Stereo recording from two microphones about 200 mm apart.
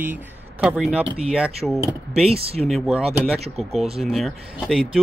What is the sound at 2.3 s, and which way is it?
Speech, 30° right (ahead or behind).